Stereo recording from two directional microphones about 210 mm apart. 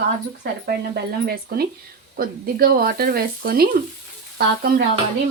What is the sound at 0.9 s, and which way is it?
Speech, 45° right (ahead or behind).